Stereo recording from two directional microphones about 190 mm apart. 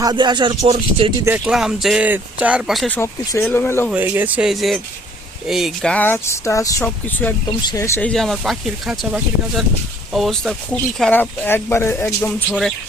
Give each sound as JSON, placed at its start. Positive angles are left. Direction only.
{"t": 0.0, "sound": "speech", "side_deg": -25}
{"t": 1.2, "sound": "speech", "side_deg": -10}
{"t": 3.8, "sound": "speech", "side_deg": -10}
{"t": 8.1, "sound": "speech", "side_deg": 0}